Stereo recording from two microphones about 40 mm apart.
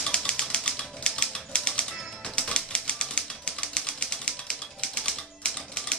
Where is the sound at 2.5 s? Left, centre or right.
Left.